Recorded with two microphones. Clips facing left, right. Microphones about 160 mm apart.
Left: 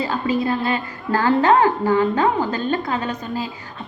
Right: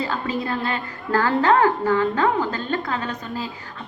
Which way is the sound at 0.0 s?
15° left (ahead or behind).